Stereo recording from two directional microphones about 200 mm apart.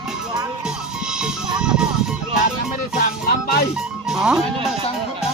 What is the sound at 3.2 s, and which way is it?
Speech, 50° left (ahead or behind).